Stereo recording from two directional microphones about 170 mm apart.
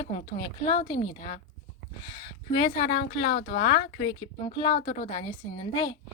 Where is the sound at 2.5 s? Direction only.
30° left (ahead or behind).